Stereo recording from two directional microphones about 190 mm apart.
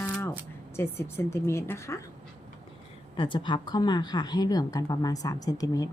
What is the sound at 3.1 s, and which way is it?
A woman's voice, 25° left (ahead or behind).